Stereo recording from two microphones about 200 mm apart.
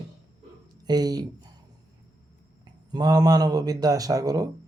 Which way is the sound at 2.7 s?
20° right (ahead or behind).